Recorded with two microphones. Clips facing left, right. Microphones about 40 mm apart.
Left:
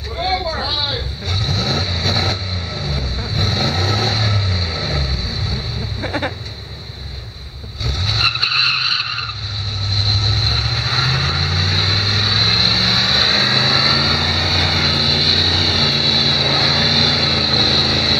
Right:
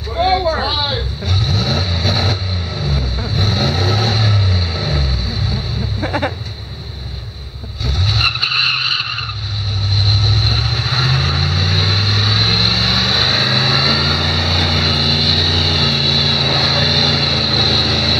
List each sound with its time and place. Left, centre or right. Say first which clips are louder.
0.1 s a sound: right 6 dB; centre
1.2 s vehicle: right 1 dB; centre
7.8 s vehicle: right 1 dB; centre